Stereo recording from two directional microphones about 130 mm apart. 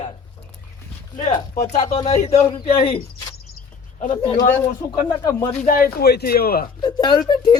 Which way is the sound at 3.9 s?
70° left (ahead or behind).